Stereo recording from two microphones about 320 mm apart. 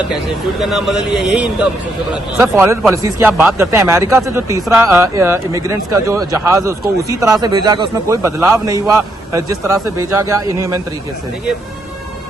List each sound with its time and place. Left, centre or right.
0.6 s a man's voice: centre